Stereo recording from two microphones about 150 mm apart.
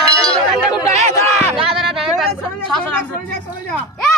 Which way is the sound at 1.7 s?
Centre (ahead or behind).